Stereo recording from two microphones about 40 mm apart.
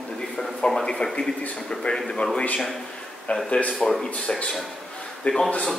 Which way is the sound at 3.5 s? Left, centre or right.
Left.